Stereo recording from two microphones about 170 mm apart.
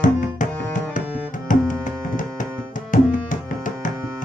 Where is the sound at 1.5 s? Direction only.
50° left (ahead or behind).